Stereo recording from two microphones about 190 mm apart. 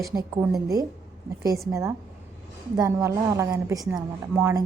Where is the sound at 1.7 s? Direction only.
15° right (ahead or behind).